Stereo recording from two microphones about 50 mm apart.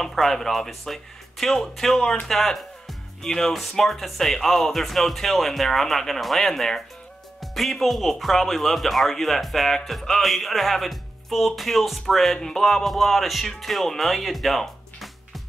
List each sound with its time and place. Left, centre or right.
0.0 s speech: centre